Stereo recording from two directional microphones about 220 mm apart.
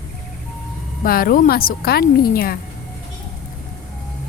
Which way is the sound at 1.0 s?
40° left (ahead or behind).